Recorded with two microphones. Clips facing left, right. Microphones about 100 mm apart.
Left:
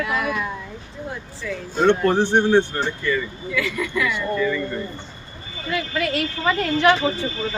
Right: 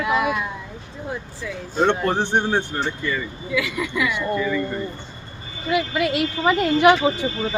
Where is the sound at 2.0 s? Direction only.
15° right (ahead or behind).